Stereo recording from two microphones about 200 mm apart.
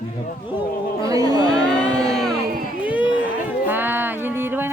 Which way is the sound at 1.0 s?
20° right (ahead or behind).